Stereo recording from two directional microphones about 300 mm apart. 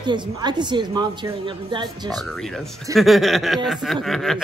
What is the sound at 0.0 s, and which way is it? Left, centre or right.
A woman's voice, centre.